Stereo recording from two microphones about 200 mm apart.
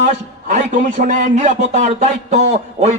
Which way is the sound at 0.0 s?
35° right (ahead or behind).